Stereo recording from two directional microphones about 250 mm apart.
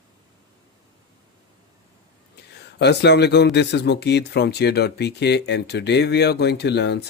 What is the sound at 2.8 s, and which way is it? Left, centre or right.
Speech, left.